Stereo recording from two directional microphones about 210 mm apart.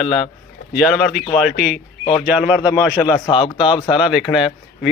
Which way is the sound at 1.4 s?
5° right (ahead or behind).